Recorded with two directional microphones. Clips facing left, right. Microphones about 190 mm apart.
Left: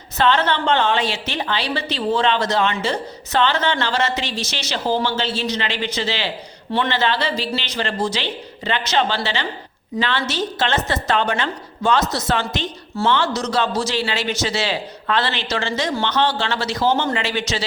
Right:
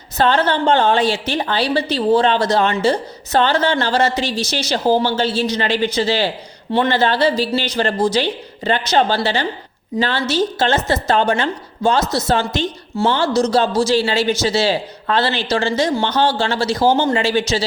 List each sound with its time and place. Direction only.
0.2 s a woman's voice: 35° right (ahead or behind)